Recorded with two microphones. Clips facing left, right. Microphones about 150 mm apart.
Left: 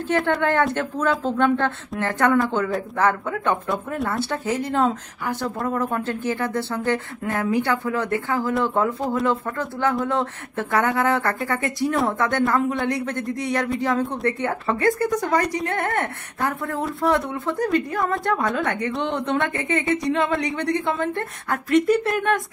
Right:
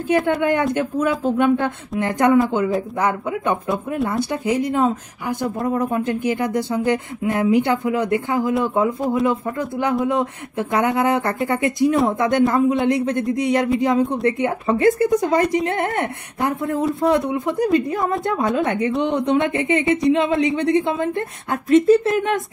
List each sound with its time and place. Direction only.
0.1 s a woman's voice: 10° right (ahead or behind)